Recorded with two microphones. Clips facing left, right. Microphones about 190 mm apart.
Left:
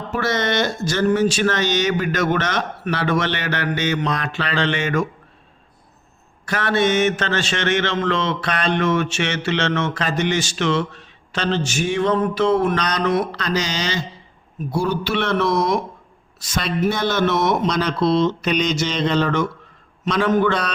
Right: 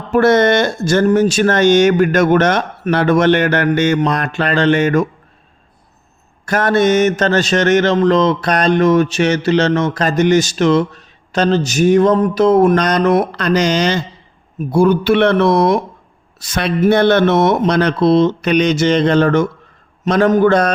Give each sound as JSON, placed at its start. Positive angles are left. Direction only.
{"t": 0.1, "sound": "speech", "side_deg": -55}
{"t": 6.4, "sound": "mantra", "side_deg": -45}
{"t": 14.7, "sound": "speech", "side_deg": -55}